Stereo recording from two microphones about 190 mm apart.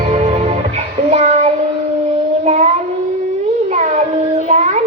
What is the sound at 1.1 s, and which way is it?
Child singing, 35° right (ahead or behind).